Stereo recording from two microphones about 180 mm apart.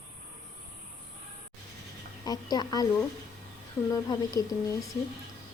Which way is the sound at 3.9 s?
20° left (ahead or behind).